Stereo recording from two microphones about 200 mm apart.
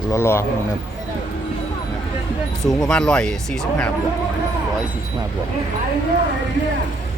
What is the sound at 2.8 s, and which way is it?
Speech, 5° left (ahead or behind).